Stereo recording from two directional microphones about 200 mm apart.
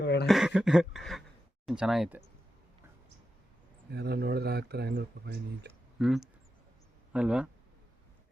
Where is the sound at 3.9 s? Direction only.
55° right (ahead or behind).